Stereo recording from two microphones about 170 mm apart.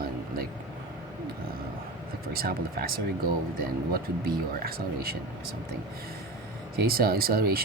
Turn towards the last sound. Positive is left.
turn(degrees=-65)  # may be behind; listen again after turning